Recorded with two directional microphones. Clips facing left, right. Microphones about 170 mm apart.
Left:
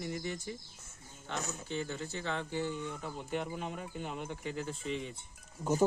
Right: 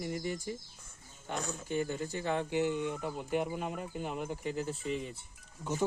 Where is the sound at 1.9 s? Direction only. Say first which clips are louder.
Right 4 dB; 15° right (ahead or behind).